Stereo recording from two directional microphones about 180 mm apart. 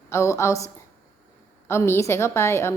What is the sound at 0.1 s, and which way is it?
A woman's voice, 15° left (ahead or behind).